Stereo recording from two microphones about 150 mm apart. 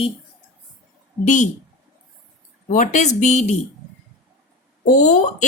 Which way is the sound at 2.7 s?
55° left (ahead or behind).